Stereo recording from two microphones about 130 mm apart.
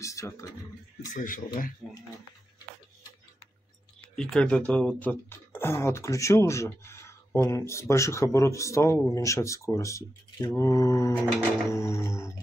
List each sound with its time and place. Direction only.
0.0 s a sound: 25° left (ahead or behind)
1.1 s speech: 90° left
1.8 s speech: 5° right (ahead or behind)
4.1 s speech: 5° left (ahead or behind); by 12.4 s 20° left (ahead or behind)